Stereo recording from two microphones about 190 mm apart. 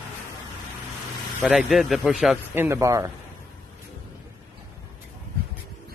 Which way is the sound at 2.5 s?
15° right (ahead or behind).